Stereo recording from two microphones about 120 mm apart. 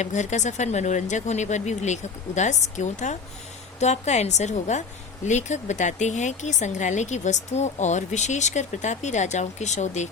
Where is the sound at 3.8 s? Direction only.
70° left (ahead or behind).